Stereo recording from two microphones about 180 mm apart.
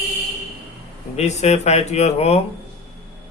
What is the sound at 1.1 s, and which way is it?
Speech, 40° left (ahead or behind).